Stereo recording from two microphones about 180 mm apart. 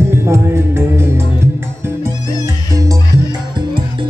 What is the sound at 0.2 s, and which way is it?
Music, 15° right (ahead or behind).